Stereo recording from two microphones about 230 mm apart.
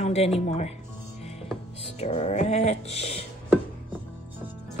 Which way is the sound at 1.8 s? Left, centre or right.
Left.